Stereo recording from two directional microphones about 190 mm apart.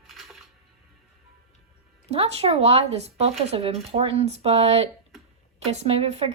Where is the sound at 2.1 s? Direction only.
30° right (ahead or behind).